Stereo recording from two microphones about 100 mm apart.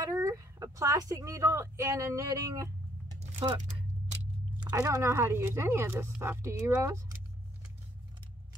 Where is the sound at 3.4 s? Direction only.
50° right (ahead or behind).